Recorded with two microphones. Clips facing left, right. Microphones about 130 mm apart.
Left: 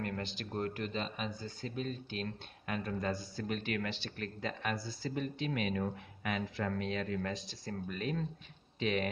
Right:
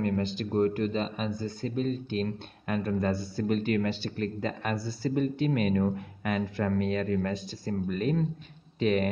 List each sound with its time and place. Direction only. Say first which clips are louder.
0.0 s speech: right 10 dB; 35° right (ahead or behind)